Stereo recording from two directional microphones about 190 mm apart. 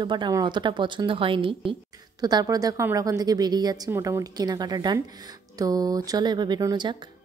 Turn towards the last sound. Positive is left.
turn(degrees=-20)  # may be behind; listen again after turning